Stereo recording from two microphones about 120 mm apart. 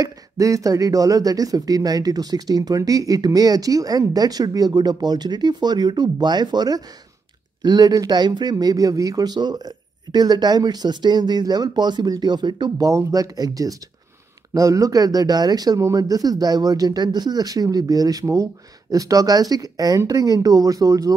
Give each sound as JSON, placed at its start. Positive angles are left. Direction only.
{"t": 0.0, "sound": "speech", "side_deg": -30}